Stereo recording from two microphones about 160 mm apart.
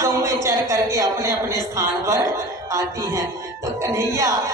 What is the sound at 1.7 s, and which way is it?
Speech, 20° right (ahead or behind).